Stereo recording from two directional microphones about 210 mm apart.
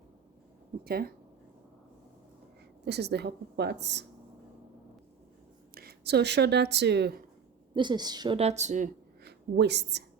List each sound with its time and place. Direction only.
0.9 s a woman's voice: 45° right (ahead or behind)
2.8 s a woman's voice: 50° right (ahead or behind)
5.7 s speech: 45° right (ahead or behind)
7.7 s a woman's voice: 20° right (ahead or behind)
9.2 s a woman's voice: 55° right (ahead or behind)